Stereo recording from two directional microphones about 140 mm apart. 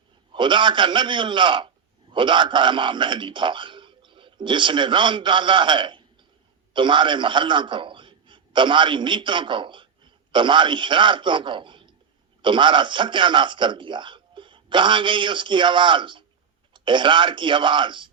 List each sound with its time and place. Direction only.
0.3 s a man's voice: 35° right (ahead or behind)